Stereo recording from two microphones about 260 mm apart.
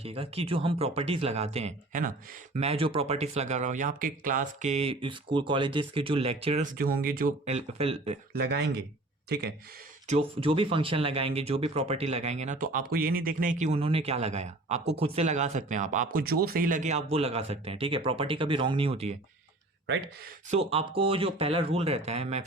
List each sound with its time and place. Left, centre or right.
0.0 s speech: right
8.3 s speech: right
10.1 s speech: right
20.5 s speech: right